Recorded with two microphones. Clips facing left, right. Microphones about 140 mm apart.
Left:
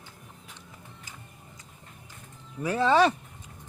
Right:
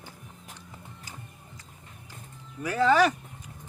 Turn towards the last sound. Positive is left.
turn(degrees=25)  # may be behind; listen again after turning